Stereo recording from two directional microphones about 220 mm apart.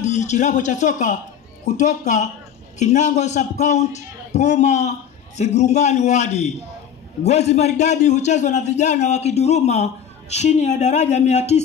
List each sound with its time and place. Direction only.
0.0 s a man's voice: 30° left (ahead or behind)